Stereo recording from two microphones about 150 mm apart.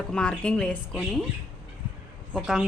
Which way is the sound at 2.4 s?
5° right (ahead or behind).